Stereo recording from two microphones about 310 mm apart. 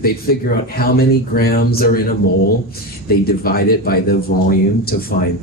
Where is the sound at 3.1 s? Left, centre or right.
Left.